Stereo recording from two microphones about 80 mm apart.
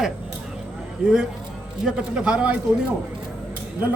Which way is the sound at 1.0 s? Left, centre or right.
Centre.